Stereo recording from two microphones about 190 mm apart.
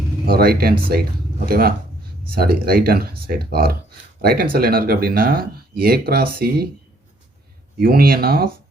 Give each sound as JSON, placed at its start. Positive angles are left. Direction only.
{"t": 0.3, "sound": "speech", "side_deg": -50}
{"t": 7.8, "sound": "speech", "side_deg": -50}